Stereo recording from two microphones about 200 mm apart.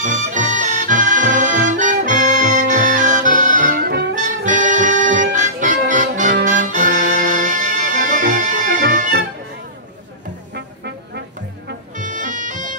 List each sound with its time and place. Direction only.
0.0 s music: 40° right (ahead or behind)
12.0 s music: 40° right (ahead or behind)